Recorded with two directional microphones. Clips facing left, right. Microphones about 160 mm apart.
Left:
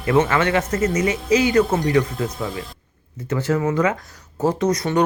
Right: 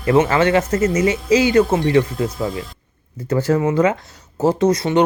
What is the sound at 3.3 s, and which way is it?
Speech, 35° right (ahead or behind).